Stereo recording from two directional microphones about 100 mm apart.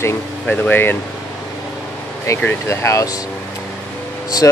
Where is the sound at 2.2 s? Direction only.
25° left (ahead or behind).